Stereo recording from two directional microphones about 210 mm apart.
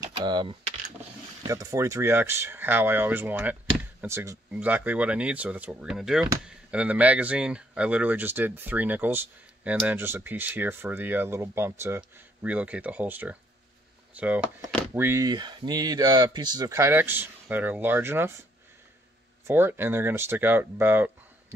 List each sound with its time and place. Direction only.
0.0 s speech: 20° right (ahead or behind)
19.4 s speech: 10° right (ahead or behind)